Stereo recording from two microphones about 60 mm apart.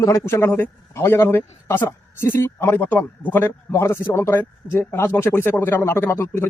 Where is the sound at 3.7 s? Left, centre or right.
Left.